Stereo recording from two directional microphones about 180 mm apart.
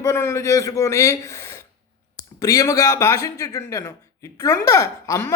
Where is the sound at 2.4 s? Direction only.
20° left (ahead or behind).